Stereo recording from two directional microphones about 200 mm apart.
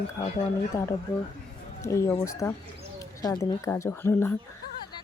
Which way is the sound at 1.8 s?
15° left (ahead or behind).